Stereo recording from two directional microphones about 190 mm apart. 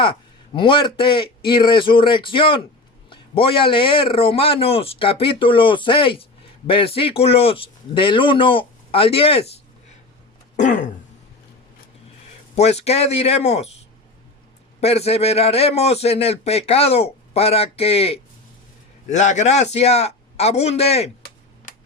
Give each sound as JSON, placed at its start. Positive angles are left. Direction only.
{"t": 0.0, "sound": "a man's voice", "side_deg": 25}
{"t": 10.6, "sound": "a man's voice", "side_deg": 40}
{"t": 12.5, "sound": "a man's voice", "side_deg": 35}
{"t": 14.8, "sound": "a man's voice", "side_deg": 35}